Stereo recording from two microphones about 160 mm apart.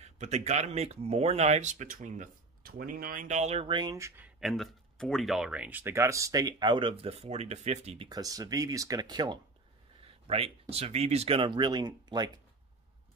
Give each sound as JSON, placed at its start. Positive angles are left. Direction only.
{"t": 0.0, "sound": "speech", "side_deg": -45}
{"t": 4.2, "sound": "speech", "side_deg": 0}
{"t": 8.1, "sound": "speech", "side_deg": -20}